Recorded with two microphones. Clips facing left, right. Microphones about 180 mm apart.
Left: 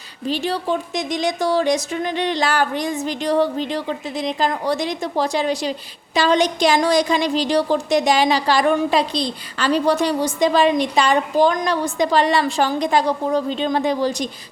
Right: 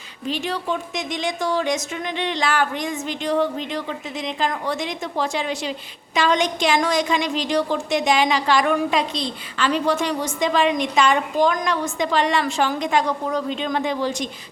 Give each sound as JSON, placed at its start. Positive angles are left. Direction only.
{"t": 0.3, "sound": "speech", "side_deg": 35}